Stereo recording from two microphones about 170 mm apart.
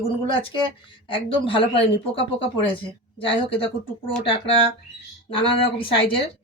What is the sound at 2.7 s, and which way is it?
Speech, 30° left (ahead or behind).